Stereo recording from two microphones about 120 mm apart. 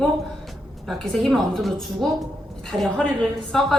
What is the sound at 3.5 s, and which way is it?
Speech, centre (ahead or behind).